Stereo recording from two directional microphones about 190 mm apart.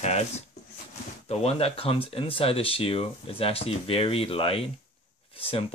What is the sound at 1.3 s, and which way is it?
Speech, 35° left (ahead or behind).